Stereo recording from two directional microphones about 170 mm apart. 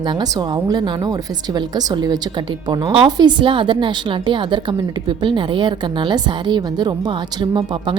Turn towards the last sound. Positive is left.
turn(degrees=-30)  # may be behind; listen again after turning